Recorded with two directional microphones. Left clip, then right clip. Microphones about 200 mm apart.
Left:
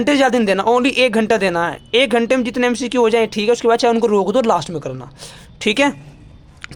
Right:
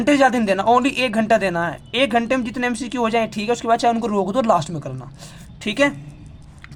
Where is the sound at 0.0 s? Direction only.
20° left (ahead or behind).